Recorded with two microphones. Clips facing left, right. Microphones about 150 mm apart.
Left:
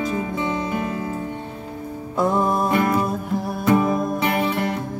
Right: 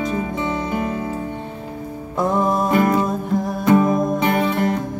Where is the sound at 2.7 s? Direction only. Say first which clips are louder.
Right 3 dB; 25° right (ahead or behind).